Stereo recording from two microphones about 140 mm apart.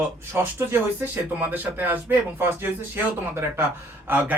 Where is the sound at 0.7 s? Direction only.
15° right (ahead or behind).